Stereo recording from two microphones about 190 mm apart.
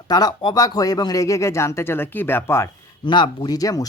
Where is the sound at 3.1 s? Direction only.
25° left (ahead or behind).